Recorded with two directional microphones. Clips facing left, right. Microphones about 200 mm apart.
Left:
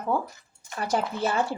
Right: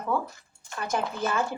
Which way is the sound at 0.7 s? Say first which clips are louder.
Left 2 dB; 35° left (ahead or behind).